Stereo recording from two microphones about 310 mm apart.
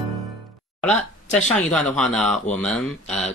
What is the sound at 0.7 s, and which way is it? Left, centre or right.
Speech, centre.